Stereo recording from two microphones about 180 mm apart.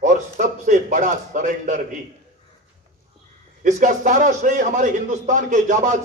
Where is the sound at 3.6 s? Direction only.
45° right (ahead or behind).